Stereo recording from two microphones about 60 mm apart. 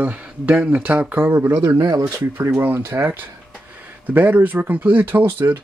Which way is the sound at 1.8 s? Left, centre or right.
Right.